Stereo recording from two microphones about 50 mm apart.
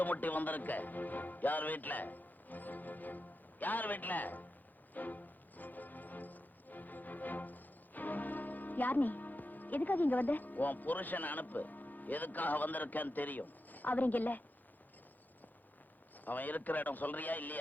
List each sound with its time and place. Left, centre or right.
0.0 s a man's voice: left
4.9 s music: left
16.1 s a man's voice: left